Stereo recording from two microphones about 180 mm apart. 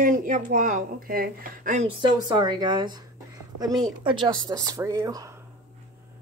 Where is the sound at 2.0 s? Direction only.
25° right (ahead or behind).